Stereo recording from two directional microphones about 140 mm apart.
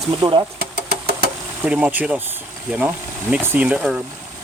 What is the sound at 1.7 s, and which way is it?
Speech, 10° right (ahead or behind).